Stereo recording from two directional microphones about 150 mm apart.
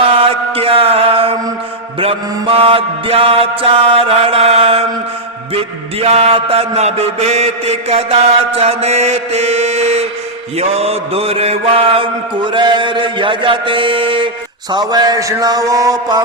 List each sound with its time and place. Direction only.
0.0 s mantra: 40° right (ahead or behind)
6.0 s mantra: 40° right (ahead or behind)
14.7 s a man's voice: 25° right (ahead or behind)